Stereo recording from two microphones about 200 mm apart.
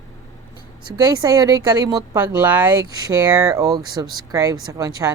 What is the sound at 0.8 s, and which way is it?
Speech, 20° right (ahead or behind).